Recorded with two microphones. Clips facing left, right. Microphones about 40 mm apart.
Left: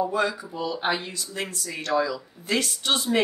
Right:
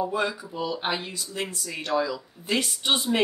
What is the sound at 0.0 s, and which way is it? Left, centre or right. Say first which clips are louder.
Speech: left 2 dB; centre.